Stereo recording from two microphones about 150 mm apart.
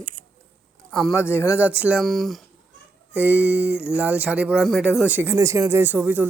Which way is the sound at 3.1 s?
10° right (ahead or behind).